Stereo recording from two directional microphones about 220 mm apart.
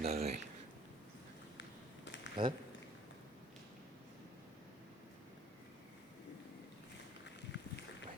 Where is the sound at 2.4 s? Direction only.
20° right (ahead or behind).